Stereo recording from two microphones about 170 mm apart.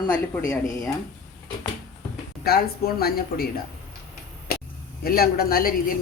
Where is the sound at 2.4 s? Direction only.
65° left (ahead or behind).